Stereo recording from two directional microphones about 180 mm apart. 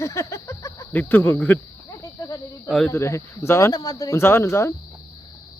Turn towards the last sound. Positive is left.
turn(degrees=15)  # may be behind; listen again after turning